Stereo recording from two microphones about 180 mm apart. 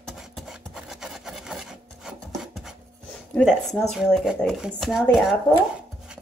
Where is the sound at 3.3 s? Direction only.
Centre (ahead or behind).